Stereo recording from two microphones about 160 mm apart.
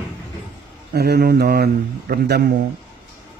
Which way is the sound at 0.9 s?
90° right.